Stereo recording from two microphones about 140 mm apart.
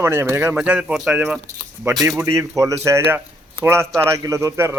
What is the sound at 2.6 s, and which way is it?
A man's voice, 20° right (ahead or behind).